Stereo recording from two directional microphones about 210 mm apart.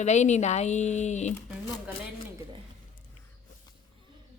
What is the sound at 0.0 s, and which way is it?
Speech, 35° left (ahead or behind).